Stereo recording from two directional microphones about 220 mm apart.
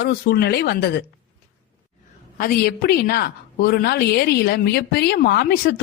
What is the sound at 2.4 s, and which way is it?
Speech, 40° left (ahead or behind).